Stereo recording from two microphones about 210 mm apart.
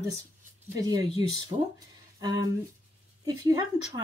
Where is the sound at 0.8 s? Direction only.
20° right (ahead or behind).